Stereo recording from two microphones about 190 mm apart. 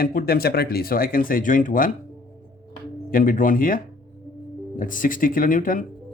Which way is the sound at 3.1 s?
45° left (ahead or behind).